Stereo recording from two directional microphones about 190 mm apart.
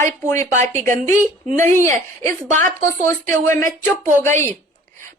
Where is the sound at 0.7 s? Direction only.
40° right (ahead or behind).